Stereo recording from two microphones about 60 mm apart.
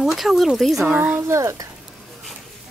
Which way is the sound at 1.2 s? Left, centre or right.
Right.